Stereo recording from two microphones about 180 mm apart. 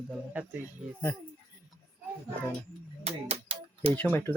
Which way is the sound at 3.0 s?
35° right (ahead or behind).